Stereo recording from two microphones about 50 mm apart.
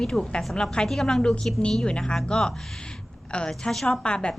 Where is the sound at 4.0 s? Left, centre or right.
Centre.